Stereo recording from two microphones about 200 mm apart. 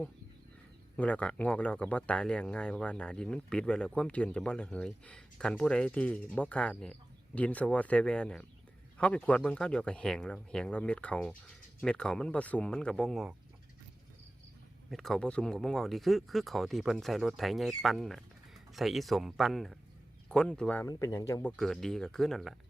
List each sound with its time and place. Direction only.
0.9 s speech: 5° left (ahead or behind)
14.8 s speech: centre (ahead or behind)
20.8 s speech: 15° left (ahead or behind)
21.5 s speech: centre (ahead or behind)